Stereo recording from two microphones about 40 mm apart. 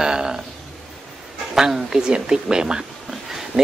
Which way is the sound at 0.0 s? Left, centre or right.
Centre.